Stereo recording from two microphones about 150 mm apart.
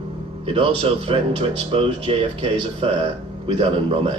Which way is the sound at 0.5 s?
40° right (ahead or behind).